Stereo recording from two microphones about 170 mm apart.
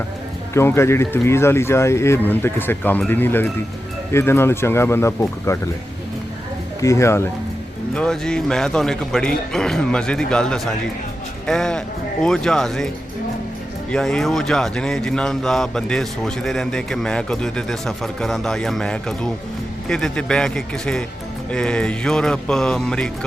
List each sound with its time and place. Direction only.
0.5 s speech: 15° left (ahead or behind)
6.8 s speech: 15° left (ahead or behind)
7.9 s speech: 5° left (ahead or behind)
13.9 s speech: 5° left (ahead or behind)